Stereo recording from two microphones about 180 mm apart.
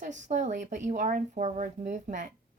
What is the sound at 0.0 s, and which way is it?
Speech, 40° right (ahead or behind).